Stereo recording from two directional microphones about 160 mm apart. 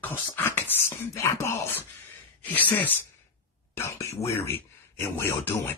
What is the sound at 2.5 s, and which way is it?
Speech, 10° left (ahead or behind).